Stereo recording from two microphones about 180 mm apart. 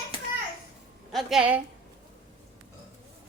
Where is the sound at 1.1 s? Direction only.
5° right (ahead or behind).